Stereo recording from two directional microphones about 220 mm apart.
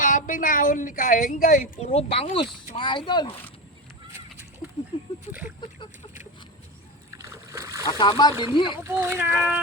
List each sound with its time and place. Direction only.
0.0 s speech: 35° left (ahead or behind); by 3.3 s 20° left (ahead or behind)
4.1 s a sound: 10° right (ahead or behind)
4.9 s a sound: 20° left (ahead or behind)
5.5 s speech: 20° left (ahead or behind)
7.1 s splash: 15° right (ahead or behind)
7.9 s speech: 20° left (ahead or behind)
8.8 s speech: 10° right (ahead or behind)